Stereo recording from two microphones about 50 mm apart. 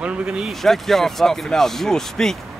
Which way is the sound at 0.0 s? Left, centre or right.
Centre.